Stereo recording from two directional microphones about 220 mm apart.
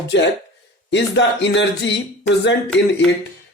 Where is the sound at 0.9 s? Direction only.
55° left (ahead or behind).